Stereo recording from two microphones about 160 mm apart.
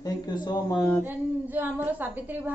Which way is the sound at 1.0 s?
10° right (ahead or behind).